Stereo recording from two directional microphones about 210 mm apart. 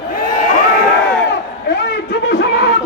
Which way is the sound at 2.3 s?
55° left (ahead or behind).